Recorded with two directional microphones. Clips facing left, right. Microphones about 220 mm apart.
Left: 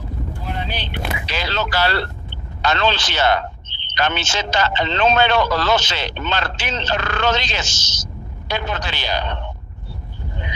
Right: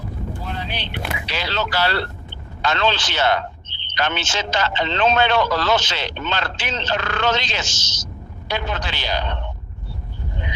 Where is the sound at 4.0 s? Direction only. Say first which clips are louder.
Left 2 dB; 40° left (ahead or behind).